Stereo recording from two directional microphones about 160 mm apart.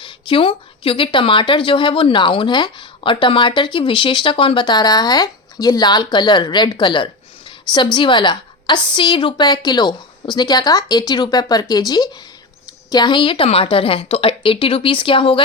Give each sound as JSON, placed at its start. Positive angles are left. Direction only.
{"t": 0.0, "sound": "a woman's voice", "side_deg": 30}